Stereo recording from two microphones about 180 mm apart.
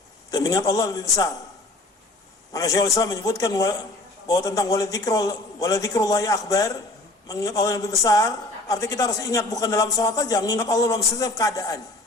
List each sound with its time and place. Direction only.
0.3 s a woman's voice: 20° left (ahead or behind)
2.5 s a woman's voice: 20° left (ahead or behind)